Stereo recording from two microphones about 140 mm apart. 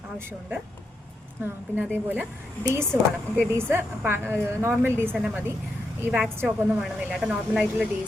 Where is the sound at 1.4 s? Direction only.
10° right (ahead or behind).